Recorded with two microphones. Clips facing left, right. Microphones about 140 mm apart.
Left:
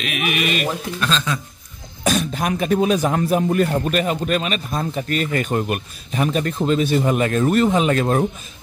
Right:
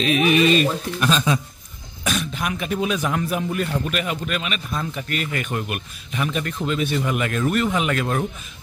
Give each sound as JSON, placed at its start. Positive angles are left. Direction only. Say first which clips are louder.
{"t": 0.0, "sound": "speech", "louder": "right 6 dB", "side_deg": -30}
{"t": 0.9, "sound": "a man's voice", "louder": "right 4 dB", "side_deg": -10}
{"t": 2.0, "sound": "speech", "louder": "left 5 dB", "side_deg": 40}